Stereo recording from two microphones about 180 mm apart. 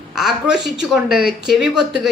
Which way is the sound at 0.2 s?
Centre (ahead or behind).